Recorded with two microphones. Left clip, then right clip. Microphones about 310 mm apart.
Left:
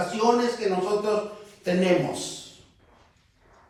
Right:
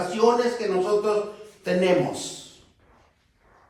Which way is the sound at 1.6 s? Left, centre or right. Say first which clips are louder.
Right 2 dB; centre.